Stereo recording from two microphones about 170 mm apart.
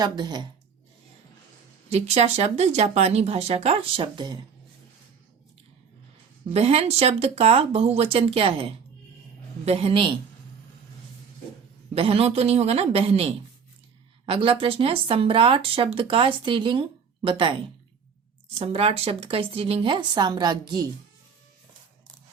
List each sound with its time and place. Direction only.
0.0 s speech: 25° right (ahead or behind)
1.9 s speech: 40° right (ahead or behind)
6.5 s speech: 35° right (ahead or behind)
11.9 s speech: 35° right (ahead or behind)
18.6 s speech: 35° right (ahead or behind)